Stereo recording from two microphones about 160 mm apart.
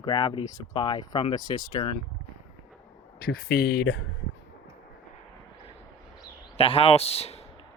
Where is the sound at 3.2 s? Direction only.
70° left (ahead or behind).